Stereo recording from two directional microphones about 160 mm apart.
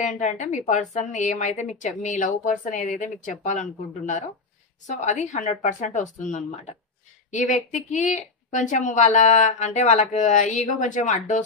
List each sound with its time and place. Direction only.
0.0 s a woman's voice: 50° left (ahead or behind)